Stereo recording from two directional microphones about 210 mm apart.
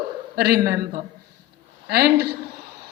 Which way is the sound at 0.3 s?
50° right (ahead or behind).